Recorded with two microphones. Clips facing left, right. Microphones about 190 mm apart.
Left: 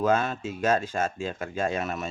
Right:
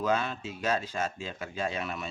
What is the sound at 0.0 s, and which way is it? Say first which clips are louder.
Speech: left 5 dB; 50° left (ahead or behind).